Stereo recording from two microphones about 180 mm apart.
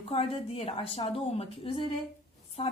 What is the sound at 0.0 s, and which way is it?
A woman's voice, 30° left (ahead or behind).